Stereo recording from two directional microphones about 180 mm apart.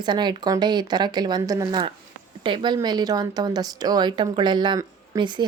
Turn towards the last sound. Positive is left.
turn(degrees=-25)  # may be behind; listen again after turning